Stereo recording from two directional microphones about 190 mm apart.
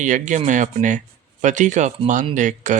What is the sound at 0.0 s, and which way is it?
Speech, 40° right (ahead or behind).